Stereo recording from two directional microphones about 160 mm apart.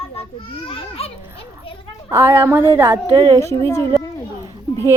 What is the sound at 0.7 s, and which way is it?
Speech, 35° left (ahead or behind).